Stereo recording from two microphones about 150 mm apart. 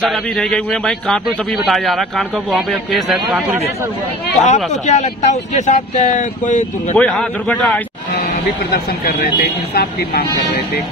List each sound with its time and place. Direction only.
0.0 s a man's voice: 5° left (ahead or behind)
4.8 s speech: 50° left (ahead or behind)
7.0 s a man's voice: 5° left (ahead or behind)
8.2 s speech: 90° left